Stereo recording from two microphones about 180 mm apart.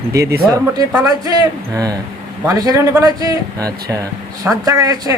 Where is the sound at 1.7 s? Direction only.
20° right (ahead or behind).